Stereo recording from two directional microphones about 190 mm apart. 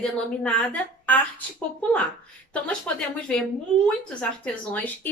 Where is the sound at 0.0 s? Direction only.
5° left (ahead or behind).